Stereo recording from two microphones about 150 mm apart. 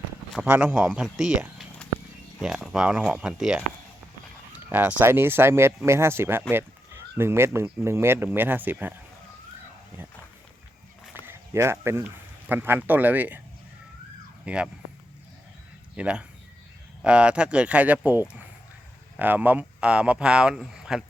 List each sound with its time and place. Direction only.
0.4 s speech: 10° right (ahead or behind)
11.3 s speech: 15° right (ahead or behind)
14.4 s speech: 5° right (ahead or behind)
16.0 s speech: 5° right (ahead or behind)